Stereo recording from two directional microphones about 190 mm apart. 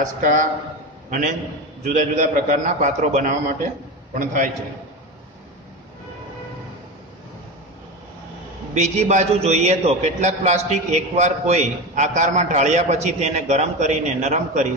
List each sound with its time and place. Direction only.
0.0 s a man's voice: 40° right (ahead or behind)
1.8 s a man's voice: 40° right (ahead or behind)
8.7 s a man's voice: 35° right (ahead or behind)